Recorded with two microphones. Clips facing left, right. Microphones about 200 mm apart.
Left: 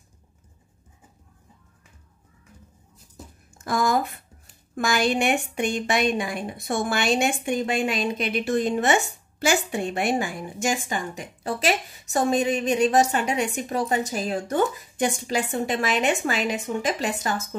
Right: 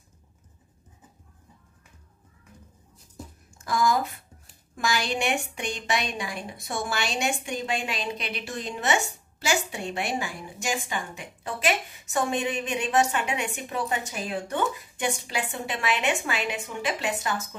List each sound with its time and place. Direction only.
3.6 s a woman's voice: 55° left (ahead or behind)